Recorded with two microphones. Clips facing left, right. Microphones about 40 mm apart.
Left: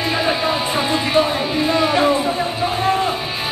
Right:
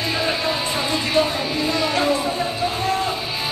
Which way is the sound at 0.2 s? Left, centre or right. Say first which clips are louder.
Left 3 dB; centre.